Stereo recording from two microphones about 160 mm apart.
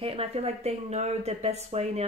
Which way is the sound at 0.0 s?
40° right (ahead or behind).